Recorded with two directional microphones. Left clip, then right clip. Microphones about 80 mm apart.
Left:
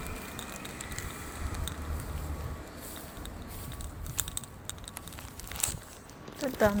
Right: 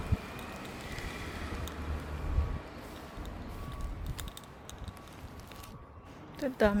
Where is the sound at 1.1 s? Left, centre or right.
Left.